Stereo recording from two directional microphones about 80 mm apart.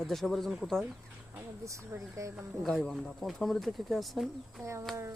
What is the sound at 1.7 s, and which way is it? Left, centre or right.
Speech, right.